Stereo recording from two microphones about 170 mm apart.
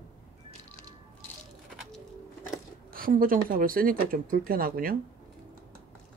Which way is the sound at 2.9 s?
55° right (ahead or behind).